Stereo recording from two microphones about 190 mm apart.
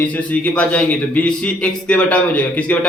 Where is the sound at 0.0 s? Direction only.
5° left (ahead or behind).